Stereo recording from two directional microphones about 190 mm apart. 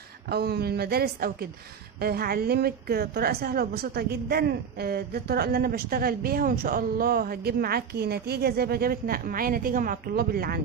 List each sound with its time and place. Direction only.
0.3 s a woman's voice: 55° right (ahead or behind)